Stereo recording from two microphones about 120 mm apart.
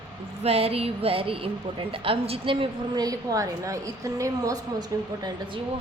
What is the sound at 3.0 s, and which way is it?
A woman's voice, 30° right (ahead or behind).